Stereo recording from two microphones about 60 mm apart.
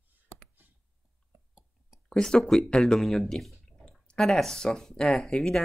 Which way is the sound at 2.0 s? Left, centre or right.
Centre.